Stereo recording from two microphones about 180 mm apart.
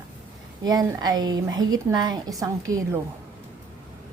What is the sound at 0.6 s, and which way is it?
A woman's voice, 20° right (ahead or behind).